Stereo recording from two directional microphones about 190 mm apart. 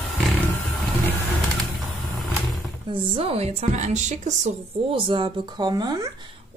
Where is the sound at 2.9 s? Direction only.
30° right (ahead or behind).